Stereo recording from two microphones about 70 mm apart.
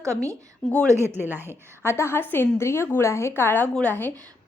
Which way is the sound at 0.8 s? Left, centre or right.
Right.